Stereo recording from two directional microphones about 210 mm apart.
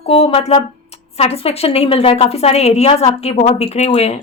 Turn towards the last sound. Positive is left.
turn(degrees=30)  # may be behind; listen again after turning